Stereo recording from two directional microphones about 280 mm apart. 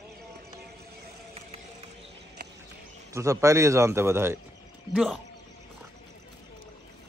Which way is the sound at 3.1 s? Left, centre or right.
Centre.